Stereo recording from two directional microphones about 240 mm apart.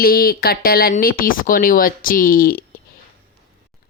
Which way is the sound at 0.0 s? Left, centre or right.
Left.